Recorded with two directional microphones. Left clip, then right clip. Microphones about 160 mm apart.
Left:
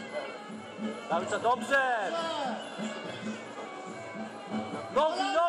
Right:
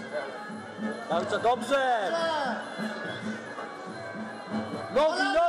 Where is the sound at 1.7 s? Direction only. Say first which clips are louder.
Right 2 dB; 50° right (ahead or behind).